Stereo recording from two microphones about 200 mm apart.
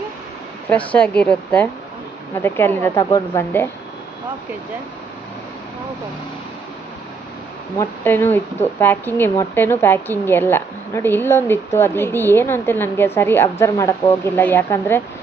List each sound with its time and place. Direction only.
0.7 s a woman's voice: 5° left (ahead or behind)
8.0 s a woman's voice: 10° left (ahead or behind)